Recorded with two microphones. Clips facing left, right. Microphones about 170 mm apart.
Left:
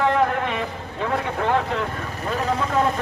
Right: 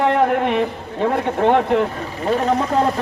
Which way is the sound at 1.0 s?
25° right (ahead or behind).